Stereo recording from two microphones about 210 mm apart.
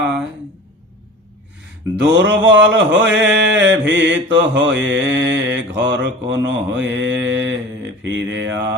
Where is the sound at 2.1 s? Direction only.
60° right (ahead or behind).